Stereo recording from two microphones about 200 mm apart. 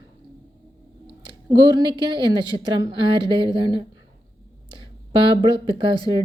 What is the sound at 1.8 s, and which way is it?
A woman's voice, 20° right (ahead or behind).